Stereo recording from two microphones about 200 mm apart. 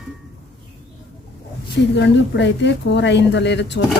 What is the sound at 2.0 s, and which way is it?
A woman's voice, 60° left (ahead or behind).